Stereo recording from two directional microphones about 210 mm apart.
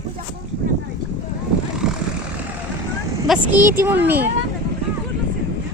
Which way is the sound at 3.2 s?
5° right (ahead or behind).